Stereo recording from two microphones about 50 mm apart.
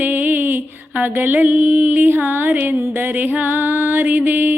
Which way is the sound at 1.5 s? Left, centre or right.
Right.